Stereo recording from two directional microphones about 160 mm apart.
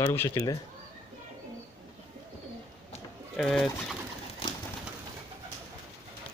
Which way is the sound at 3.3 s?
5° left (ahead or behind).